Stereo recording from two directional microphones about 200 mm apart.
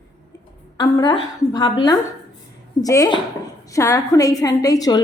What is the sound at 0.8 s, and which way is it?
A woman's voice, 20° left (ahead or behind).